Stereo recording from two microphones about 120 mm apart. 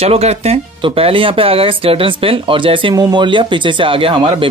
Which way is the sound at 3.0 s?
35° right (ahead or behind).